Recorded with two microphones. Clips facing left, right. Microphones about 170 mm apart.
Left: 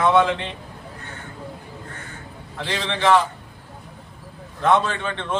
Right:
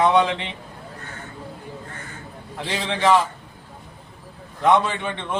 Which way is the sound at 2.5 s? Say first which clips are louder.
Even; 15° right (ahead or behind).